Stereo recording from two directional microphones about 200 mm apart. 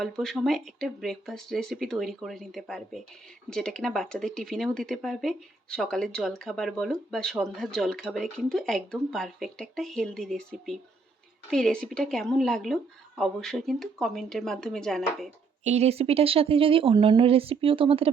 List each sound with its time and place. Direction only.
0.0 s speech: centre (ahead or behind)
15.6 s speech: 35° right (ahead or behind)